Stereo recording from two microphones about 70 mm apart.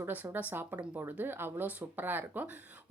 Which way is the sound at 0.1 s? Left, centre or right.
Right.